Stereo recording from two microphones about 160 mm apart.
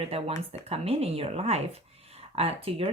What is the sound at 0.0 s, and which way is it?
Speech, 40° right (ahead or behind).